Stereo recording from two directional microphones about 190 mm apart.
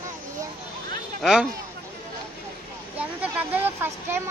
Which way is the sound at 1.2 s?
5° right (ahead or behind).